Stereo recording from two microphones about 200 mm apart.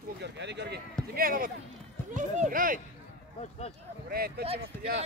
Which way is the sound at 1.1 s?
45° right (ahead or behind).